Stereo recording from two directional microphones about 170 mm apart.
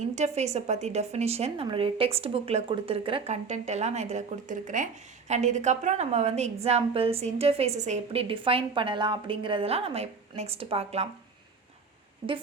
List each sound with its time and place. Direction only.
0.2 s speech: 40° right (ahead or behind)